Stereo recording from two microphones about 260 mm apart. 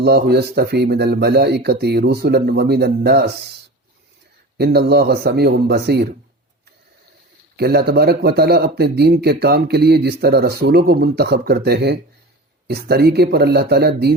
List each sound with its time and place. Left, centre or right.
0.0 s speech: right
4.5 s speech: right
7.5 s speech: right